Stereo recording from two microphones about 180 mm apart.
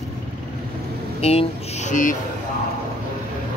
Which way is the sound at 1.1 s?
35° left (ahead or behind).